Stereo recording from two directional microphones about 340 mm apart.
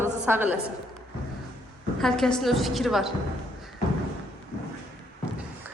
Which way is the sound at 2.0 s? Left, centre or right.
Centre.